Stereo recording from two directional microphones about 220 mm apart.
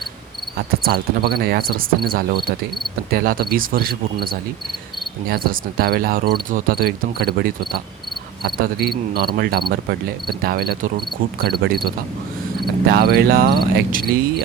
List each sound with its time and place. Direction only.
0.9 s cricket: 45° right (ahead or behind)
3.1 s speech: 40° right (ahead or behind)
5.3 s cricket: 45° right (ahead or behind)
12.9 s cricket: 45° right (ahead or behind)